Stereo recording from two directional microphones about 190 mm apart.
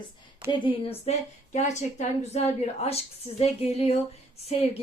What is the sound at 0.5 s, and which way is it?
Speech, 25° left (ahead or behind).